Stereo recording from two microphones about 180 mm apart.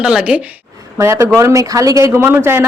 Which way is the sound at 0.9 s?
15° right (ahead or behind).